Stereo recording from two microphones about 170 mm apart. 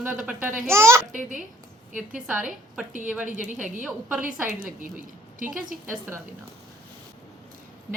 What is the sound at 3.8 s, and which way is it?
Speech, 10° right (ahead or behind).